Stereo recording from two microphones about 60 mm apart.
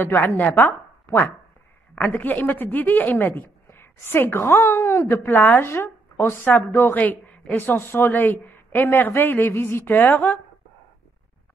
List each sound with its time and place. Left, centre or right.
0.0 s speech: left
0.4 s chopping: left
1.0 s a sound: left
2.0 s speech: left
5.2 s speech: left
5.7 s speech: left
6.4 s speech: left